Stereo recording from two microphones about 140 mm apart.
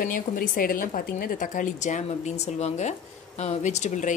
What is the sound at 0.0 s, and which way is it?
A woman's voice, 85° left.